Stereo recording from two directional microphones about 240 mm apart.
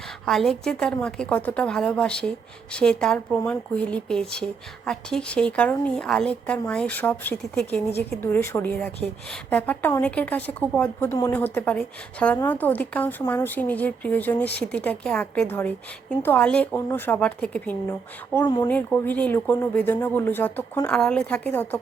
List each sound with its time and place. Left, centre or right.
0.3 s a woman's voice: centre
18.3 s speech: centre
18.7 s speech: centre